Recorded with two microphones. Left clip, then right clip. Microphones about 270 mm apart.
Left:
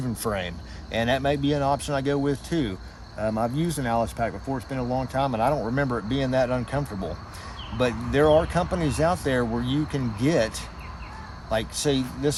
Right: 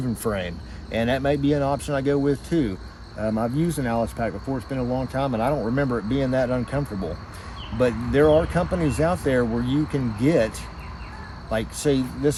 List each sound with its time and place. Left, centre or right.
0.2 s speech: left
11.5 s speech: left